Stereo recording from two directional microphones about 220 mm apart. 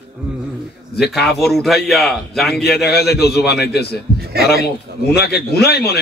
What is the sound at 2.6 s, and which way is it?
A man's voice, 45° left (ahead or behind).